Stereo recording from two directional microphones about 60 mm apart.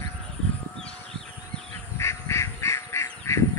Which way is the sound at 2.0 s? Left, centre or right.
Left.